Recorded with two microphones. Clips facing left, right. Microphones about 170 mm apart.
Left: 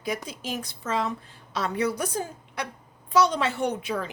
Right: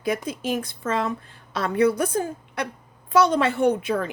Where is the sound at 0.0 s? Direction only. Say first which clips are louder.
Right 6 dB; 55° right (ahead or behind).